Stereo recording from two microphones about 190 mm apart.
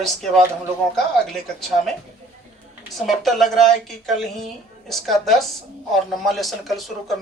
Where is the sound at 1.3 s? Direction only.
Centre (ahead or behind).